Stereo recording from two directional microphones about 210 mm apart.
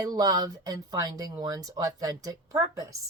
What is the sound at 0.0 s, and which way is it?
A woman's voice, 20° right (ahead or behind).